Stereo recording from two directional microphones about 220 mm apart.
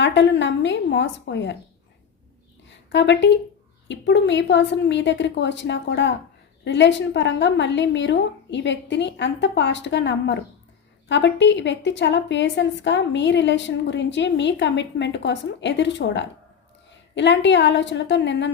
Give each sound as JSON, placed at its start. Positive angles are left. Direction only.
{"t": 0.0, "sound": "a woman's voice", "side_deg": 55}
{"t": 2.6, "sound": "a woman's voice", "side_deg": 55}